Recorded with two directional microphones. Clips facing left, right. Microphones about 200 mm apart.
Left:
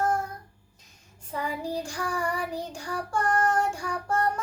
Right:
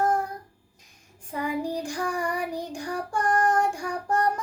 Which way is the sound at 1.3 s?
15° right (ahead or behind).